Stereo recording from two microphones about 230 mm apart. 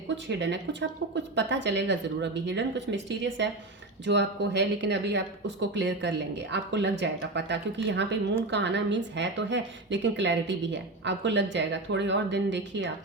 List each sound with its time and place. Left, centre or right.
0.3 s a woman's voice: right